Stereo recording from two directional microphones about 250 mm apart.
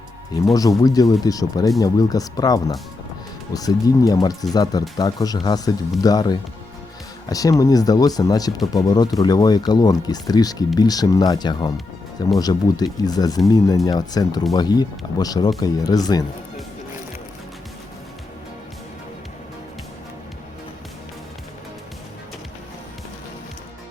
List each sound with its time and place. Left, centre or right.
0.4 s speech: centre